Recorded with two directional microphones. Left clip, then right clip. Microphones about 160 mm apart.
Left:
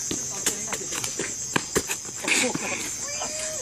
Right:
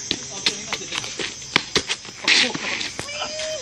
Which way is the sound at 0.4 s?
Centre (ahead or behind).